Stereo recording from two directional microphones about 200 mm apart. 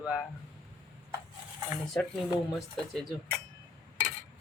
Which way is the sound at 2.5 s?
Centre (ahead or behind).